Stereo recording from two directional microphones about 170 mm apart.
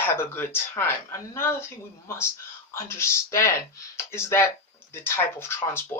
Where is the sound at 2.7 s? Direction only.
15° left (ahead or behind).